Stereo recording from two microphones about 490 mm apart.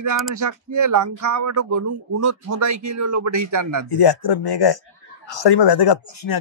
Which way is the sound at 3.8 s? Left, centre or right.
Left.